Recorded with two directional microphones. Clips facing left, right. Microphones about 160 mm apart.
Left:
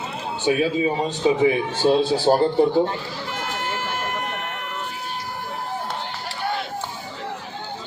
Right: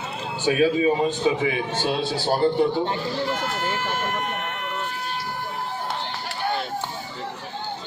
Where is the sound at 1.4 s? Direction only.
35° left (ahead or behind).